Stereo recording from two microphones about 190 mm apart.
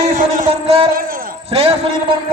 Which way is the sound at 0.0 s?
45° right (ahead or behind).